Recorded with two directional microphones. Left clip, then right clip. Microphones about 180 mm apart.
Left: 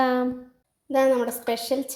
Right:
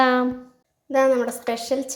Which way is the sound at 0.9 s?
Centre (ahead or behind).